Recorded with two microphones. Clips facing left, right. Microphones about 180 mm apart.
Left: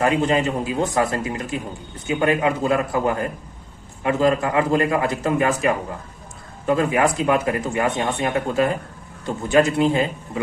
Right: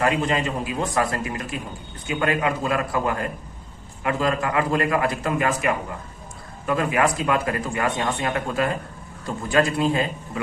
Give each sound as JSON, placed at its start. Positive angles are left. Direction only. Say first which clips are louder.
{"t": 0.0, "sound": "speech", "louder": "left 3 dB", "side_deg": 25}